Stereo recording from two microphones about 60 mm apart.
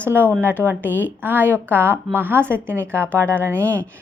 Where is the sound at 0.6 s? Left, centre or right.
Right.